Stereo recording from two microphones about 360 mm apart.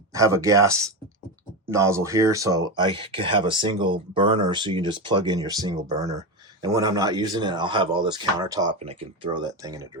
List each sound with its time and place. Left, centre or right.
0.1 s speech: centre
1.7 s speech: centre